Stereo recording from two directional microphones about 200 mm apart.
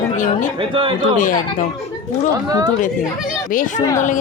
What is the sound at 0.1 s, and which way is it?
Speech, 40° left (ahead or behind).